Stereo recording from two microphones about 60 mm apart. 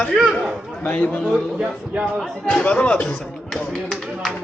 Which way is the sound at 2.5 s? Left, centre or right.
Left.